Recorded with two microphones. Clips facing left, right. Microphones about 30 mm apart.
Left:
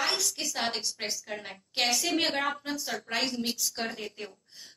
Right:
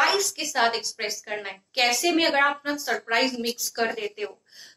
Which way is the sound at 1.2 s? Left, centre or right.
Right.